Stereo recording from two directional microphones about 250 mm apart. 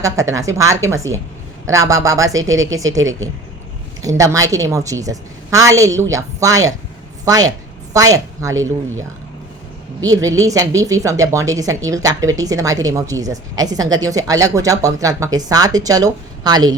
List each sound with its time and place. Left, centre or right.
0.0 s a woman's voice: centre
2.3 s speech: right
2.7 s a woman's voice: centre
3.0 s speech: right
4.2 s a woman's voice: centre
10.1 s a woman's voice: centre